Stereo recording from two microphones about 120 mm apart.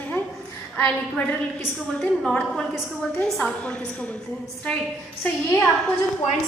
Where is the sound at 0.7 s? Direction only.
15° left (ahead or behind).